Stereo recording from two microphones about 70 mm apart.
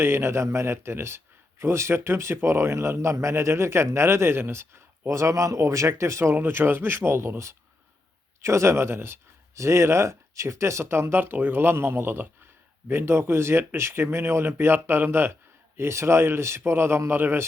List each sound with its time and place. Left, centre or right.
0.0 s speech: right